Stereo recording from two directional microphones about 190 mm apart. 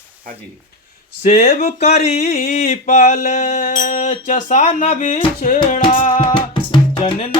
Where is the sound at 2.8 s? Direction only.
50° left (ahead or behind).